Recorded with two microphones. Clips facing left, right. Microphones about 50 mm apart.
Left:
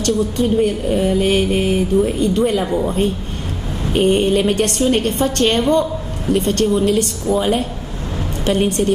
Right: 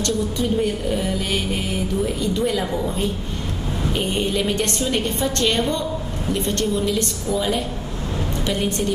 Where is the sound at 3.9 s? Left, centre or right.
Left.